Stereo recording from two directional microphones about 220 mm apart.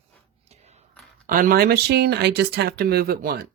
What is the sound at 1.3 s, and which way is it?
Speech, 40° right (ahead or behind).